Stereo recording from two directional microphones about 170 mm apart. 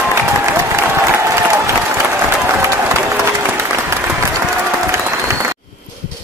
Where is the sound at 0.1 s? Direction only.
15° right (ahead or behind).